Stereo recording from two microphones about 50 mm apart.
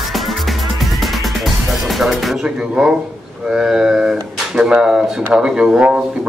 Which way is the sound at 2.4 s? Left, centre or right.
Centre.